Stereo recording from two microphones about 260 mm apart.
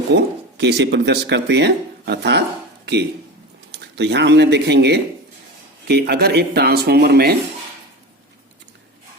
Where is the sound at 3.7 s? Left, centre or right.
Right.